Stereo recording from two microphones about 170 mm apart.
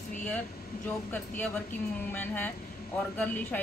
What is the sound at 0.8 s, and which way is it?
A woman's voice, 10° left (ahead or behind).